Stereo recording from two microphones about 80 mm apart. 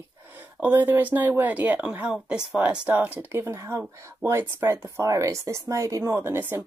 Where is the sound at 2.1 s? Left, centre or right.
Centre.